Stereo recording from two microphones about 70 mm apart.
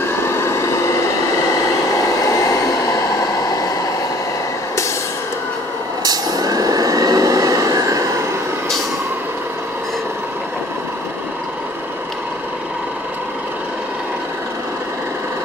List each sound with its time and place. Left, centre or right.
0.3 s vehicle: left
6.0 s vehicle: right